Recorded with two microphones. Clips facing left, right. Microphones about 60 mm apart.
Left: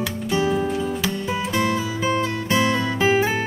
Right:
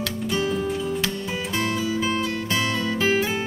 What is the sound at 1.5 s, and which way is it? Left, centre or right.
Music, left.